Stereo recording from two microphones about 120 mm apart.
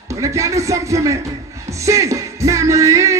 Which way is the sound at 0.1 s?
25° right (ahead or behind).